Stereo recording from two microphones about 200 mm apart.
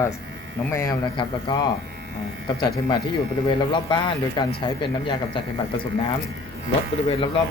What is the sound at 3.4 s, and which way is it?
Speech, 25° left (ahead or behind).